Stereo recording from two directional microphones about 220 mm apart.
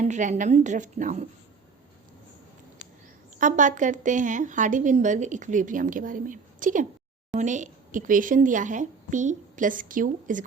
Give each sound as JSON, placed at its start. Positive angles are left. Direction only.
{"t": 0.0, "sound": "a woman's voice", "side_deg": -35}
{"t": 3.3, "sound": "a woman's voice", "side_deg": -35}